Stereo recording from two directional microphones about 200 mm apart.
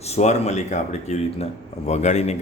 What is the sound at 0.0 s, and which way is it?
Speech, 35° left (ahead or behind).